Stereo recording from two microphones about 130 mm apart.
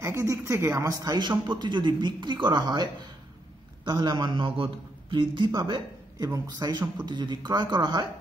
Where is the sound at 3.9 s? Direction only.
35° right (ahead or behind).